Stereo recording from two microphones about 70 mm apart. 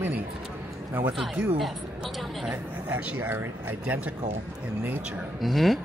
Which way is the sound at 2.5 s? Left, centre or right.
Right.